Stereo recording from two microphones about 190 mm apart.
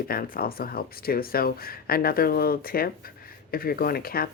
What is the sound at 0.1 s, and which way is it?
Speech, 50° left (ahead or behind).